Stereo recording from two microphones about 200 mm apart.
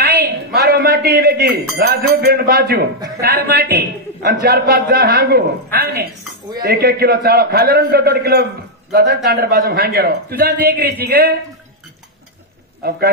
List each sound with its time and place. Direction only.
0.0 s a sound: 55° right (ahead or behind)
1.8 s a man's voice: 50° right (ahead or behind)
12.8 s a man's voice: 50° right (ahead or behind)